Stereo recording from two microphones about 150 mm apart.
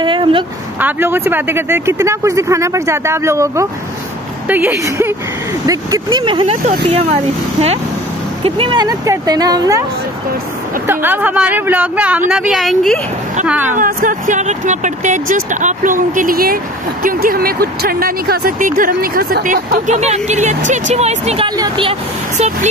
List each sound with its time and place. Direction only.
0.0 s speech: 35° right (ahead or behind)
0.7 s speech: 15° right (ahead or behind)
6.1 s speech: 35° right (ahead or behind)
8.5 s speech: 35° right (ahead or behind)
10.9 s speech: 15° right (ahead or behind)
13.5 s speech: 10° right (ahead or behind)
13.7 s speech: 60° right (ahead or behind); by 21.5 s 45° right (ahead or behind)
21.5 s speech: 30° right (ahead or behind)